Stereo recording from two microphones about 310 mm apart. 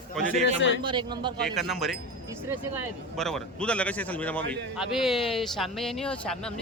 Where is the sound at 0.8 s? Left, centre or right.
Centre.